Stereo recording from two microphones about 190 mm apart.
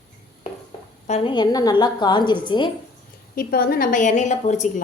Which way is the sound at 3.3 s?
50° left (ahead or behind).